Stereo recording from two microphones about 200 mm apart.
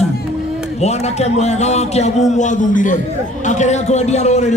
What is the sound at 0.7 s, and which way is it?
A man's voice, 35° left (ahead or behind).